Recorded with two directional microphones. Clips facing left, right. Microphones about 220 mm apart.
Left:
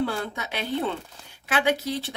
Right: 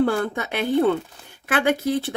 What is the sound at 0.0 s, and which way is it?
A woman's voice, 50° right (ahead or behind).